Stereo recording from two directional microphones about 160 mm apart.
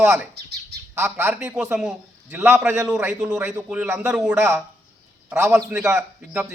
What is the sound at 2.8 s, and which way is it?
A man's voice, 5° right (ahead or behind).